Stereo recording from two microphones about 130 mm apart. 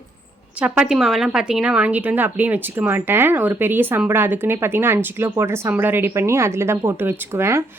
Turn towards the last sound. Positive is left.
turn(degrees=-20)  # may be behind; listen again after turning